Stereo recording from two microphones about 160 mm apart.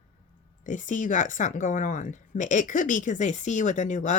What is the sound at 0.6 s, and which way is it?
Speech, 50° left (ahead or behind).